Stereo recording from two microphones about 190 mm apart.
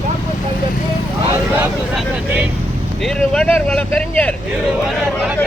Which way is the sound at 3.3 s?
5° left (ahead or behind).